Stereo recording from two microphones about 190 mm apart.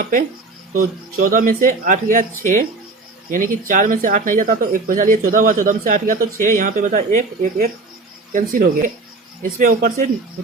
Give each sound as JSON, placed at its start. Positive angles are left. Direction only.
{"t": 0.8, "sound": "speech", "side_deg": -45}